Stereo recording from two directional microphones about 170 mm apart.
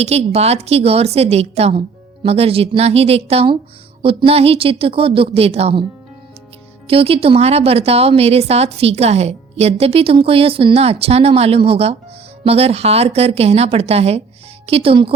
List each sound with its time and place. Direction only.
0.0 s a woman's voice: 40° right (ahead or behind)
6.8 s a woman's voice: 35° right (ahead or behind)